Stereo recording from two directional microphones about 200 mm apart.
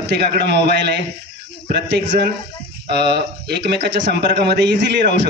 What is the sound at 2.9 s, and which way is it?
Speech, 55° right (ahead or behind).